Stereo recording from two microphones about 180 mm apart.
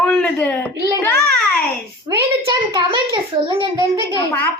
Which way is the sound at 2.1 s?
25° right (ahead or behind).